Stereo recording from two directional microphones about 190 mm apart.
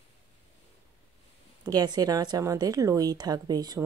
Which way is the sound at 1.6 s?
20° right (ahead or behind).